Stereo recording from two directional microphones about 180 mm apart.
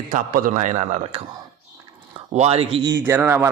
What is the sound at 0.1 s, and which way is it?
Speech, 45° right (ahead or behind).